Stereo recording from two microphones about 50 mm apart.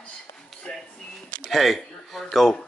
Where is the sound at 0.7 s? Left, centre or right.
Centre.